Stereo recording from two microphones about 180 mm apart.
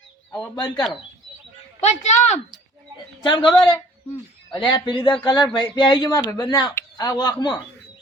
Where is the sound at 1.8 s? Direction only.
40° left (ahead or behind).